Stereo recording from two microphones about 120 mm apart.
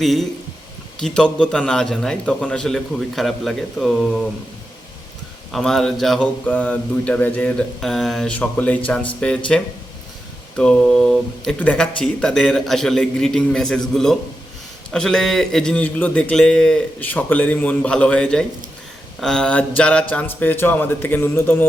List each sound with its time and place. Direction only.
0.0 s a man's voice: centre (ahead or behind)
5.5 s a man's voice: centre (ahead or behind)
7.8 s a man's voice: centre (ahead or behind)
10.6 s a man's voice: 5° left (ahead or behind); by 21.7 s 20° left (ahead or behind)